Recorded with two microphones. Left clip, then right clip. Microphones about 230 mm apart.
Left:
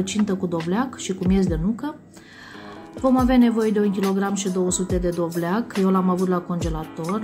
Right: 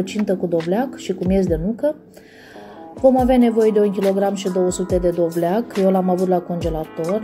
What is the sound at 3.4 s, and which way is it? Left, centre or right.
Speech, centre.